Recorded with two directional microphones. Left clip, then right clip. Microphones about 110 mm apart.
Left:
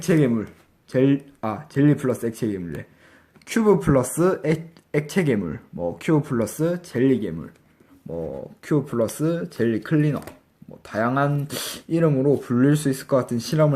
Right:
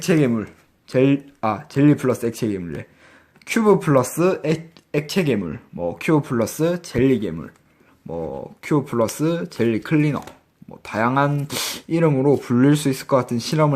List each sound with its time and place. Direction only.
0.0 s speech: 40° right (ahead or behind)
3.4 s speech: 30° right (ahead or behind); by 7.5 s 45° right (ahead or behind)
8.1 s speech: 35° right (ahead or behind)